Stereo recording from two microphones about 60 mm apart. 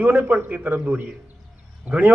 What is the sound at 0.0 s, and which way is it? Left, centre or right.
A man's voice, right.